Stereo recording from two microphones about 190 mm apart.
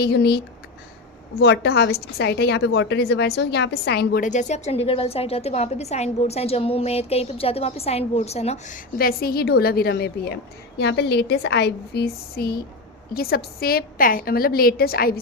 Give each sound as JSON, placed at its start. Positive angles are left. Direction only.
{"t": 0.0, "sound": "a woman's voice", "side_deg": 60}